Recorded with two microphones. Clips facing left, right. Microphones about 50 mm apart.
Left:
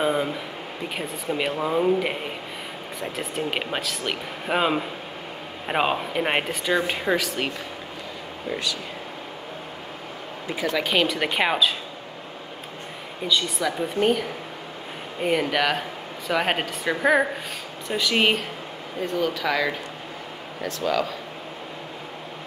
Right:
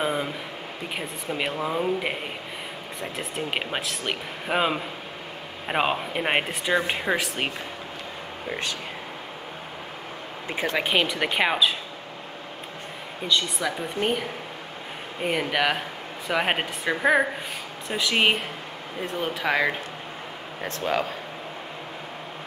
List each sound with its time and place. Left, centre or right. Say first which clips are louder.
0.0 s a sound: left 3 dB; centre
0.9 s speech: left 3 dB; centre
3.3 s speech: left 1 dB; centre
7.2 s speech: left 1 dB; right
10.5 s speech: left 1 dB; right
10.8 s a woman's voice: left 1 dB; centre
11.1 s speech: left 1 dB; centre
13.3 s speech: left 1 dB; centre
15.2 s a woman's voice: left 2 dB; centre
19.0 s speech: left 2 dB; right